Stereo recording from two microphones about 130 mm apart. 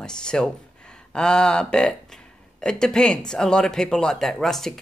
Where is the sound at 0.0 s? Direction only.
5° left (ahead or behind).